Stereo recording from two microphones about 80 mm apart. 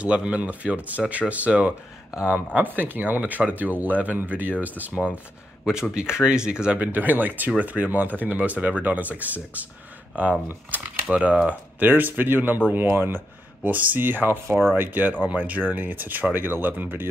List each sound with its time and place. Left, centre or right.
0.0 s speech: centre
5.7 s speech: centre
10.7 s speech: centre